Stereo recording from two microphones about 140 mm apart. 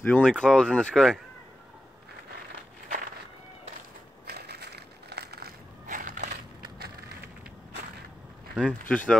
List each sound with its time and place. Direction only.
0.0 s speech: 10° left (ahead or behind)
5.4 s a sound: 70° right (ahead or behind)
8.6 s speech: 10° left (ahead or behind)